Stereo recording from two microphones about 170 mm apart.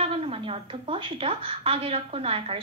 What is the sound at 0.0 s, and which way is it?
A woman's voice, 35° right (ahead or behind).